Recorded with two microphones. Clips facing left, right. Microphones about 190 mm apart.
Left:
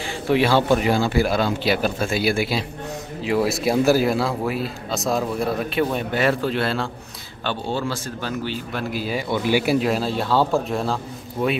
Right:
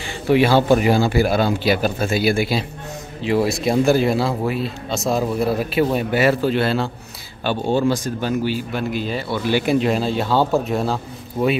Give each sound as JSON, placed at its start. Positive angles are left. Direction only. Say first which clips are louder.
{"t": 0.0, "sound": "a sound", "louder": "right 3 dB", "side_deg": 0}
{"t": 0.7, "sound": "speech", "louder": "right 3 dB", "side_deg": -5}
{"t": 7.4, "sound": "a man's voice", "louder": "right 7 dB", "side_deg": -15}
{"t": 8.9, "sound": "speech", "louder": "right 1 dB", "side_deg": 5}